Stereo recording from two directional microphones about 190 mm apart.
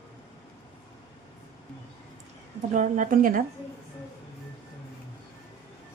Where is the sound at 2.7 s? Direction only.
40° right (ahead or behind).